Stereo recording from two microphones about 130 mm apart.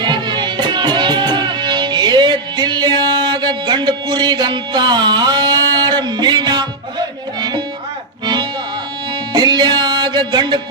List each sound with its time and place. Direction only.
0.0 s music: 35° right (ahead or behind)